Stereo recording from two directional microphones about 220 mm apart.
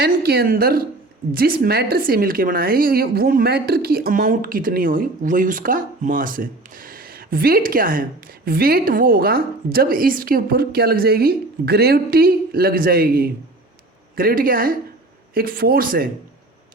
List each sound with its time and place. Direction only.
0.0 s a woman's voice: 45° right (ahead or behind)